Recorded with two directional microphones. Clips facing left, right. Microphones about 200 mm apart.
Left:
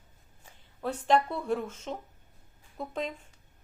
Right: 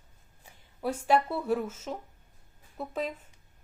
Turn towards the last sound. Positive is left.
turn(degrees=-5)  # may be behind; listen again after turning